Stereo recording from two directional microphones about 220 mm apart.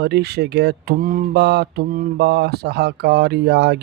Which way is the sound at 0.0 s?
50° right (ahead or behind).